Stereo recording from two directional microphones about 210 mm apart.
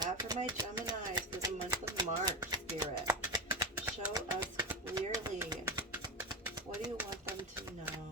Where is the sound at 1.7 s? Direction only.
20° right (ahead or behind).